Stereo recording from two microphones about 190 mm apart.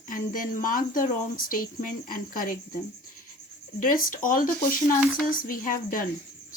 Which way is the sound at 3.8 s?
45° left (ahead or behind).